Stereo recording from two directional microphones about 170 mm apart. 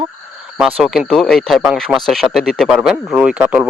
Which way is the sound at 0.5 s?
Centre (ahead or behind).